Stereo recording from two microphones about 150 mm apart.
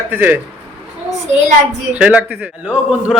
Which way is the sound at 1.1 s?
50° right (ahead or behind).